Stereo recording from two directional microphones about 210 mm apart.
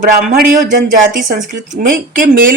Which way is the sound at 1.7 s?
40° right (ahead or behind).